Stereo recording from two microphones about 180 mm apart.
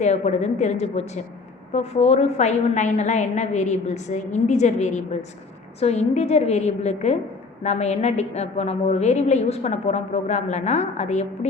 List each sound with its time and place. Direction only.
0.0 s a woman's voice: 40° left (ahead or behind)